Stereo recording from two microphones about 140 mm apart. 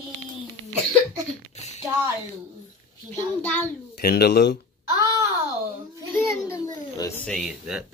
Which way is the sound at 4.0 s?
90° left.